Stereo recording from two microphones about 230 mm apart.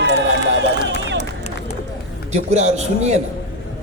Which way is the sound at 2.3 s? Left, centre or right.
Right.